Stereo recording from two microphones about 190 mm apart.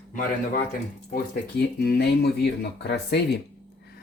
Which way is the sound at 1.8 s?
55° left (ahead or behind).